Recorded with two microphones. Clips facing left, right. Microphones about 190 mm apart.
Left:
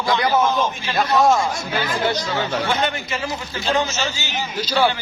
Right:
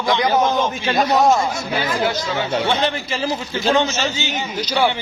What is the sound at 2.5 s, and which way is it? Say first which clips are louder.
A man's voice: right 5 dB; 30° right (ahead or behind).